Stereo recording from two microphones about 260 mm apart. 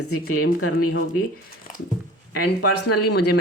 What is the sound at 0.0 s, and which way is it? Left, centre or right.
Speech, left.